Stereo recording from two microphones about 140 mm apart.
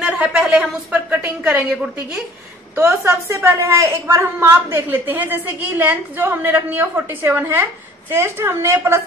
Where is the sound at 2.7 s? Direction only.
15° right (ahead or behind).